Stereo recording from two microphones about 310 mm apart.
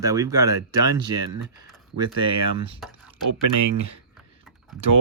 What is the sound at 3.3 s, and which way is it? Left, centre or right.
Speech, right.